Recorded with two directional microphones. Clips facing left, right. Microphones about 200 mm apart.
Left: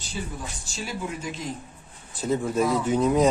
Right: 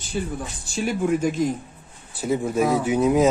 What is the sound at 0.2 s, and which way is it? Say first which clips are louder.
Speech: right 6 dB; 55° right (ahead or behind).